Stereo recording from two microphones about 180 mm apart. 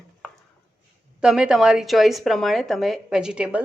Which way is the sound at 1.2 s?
5° right (ahead or behind).